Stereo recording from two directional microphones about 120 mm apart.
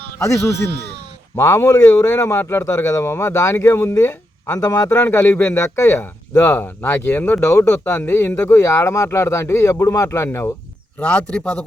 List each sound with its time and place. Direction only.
0.2 s speech: 25° left (ahead or behind)
11.0 s a man's voice: 10° left (ahead or behind)